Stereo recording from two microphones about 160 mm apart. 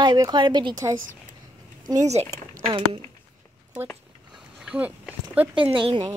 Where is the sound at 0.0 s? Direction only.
25° right (ahead or behind).